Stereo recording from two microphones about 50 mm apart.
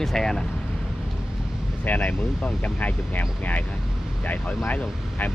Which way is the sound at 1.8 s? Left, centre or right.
Left.